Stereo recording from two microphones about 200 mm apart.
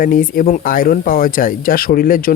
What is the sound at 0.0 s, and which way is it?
Speech, 45° left (ahead or behind).